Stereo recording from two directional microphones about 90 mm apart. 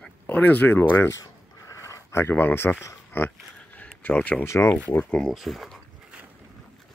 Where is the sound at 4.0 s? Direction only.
15° left (ahead or behind).